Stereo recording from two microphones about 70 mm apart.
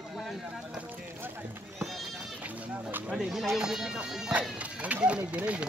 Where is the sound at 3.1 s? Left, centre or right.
Centre.